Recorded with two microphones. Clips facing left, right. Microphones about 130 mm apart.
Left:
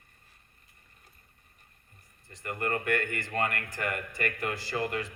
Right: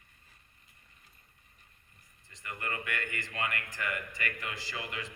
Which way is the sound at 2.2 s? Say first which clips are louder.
Left 7 dB; 55° left (ahead or behind).